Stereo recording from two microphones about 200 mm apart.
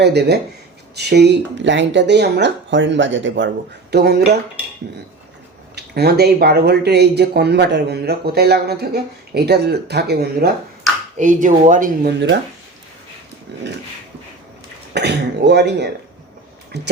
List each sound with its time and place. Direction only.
0.0 s speech: 55° right (ahead or behind)
3.9 s speech: 55° right (ahead or behind)
5.7 s speech: 55° right (ahead or behind)
11.2 s speech: 40° right (ahead or behind)
14.9 s speech: 55° right (ahead or behind)